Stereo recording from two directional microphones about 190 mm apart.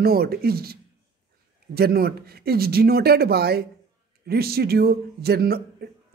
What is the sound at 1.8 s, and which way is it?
Speech, 55° right (ahead or behind).